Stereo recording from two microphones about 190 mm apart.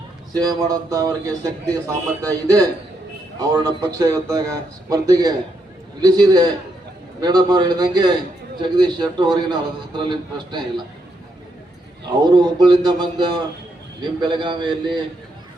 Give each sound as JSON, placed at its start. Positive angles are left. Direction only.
{"t": 0.3, "sound": "a man's voice", "side_deg": -20}
{"t": 12.2, "sound": "a man's voice", "side_deg": -20}